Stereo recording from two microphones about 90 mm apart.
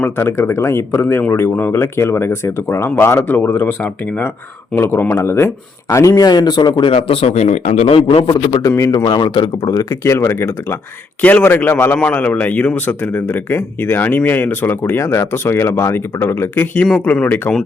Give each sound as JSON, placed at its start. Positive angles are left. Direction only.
{"t": 0.0, "sound": "speech", "side_deg": 25}
{"t": 6.2, "sound": "speech", "side_deg": 50}
{"t": 7.1, "sound": "a man's voice", "side_deg": 90}
{"t": 8.6, "sound": "speech", "side_deg": 35}
{"t": 9.0, "sound": "speech", "side_deg": 60}
{"t": 11.2, "sound": "speech", "side_deg": 20}